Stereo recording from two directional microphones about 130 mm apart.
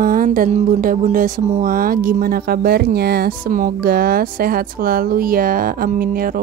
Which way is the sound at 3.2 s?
90° right.